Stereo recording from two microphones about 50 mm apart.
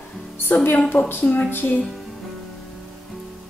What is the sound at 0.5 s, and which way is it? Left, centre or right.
Speech, left.